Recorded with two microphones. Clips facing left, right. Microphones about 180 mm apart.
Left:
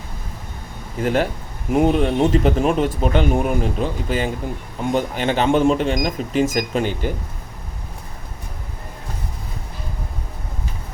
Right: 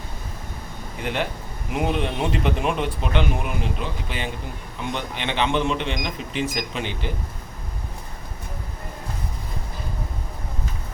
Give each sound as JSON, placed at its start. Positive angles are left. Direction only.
{"t": 1.0, "sound": "speech", "side_deg": 40}